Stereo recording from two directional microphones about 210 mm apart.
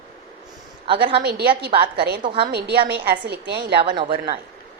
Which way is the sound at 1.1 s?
50° right (ahead or behind).